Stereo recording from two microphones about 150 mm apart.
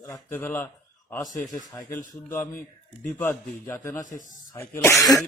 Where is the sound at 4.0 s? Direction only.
60° left (ahead or behind).